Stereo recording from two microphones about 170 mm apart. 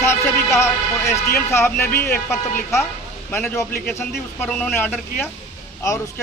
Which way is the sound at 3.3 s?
15° left (ahead or behind).